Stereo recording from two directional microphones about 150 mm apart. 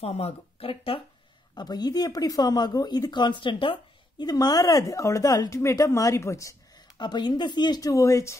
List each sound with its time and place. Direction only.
0.0 s speech: 40° left (ahead or behind)
1.5 s speech: 25° left (ahead or behind)